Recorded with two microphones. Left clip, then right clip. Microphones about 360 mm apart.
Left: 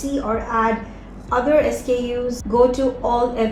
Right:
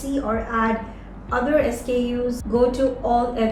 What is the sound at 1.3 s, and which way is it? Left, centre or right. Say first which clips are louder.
A woman's voice: left 3 dB; centre.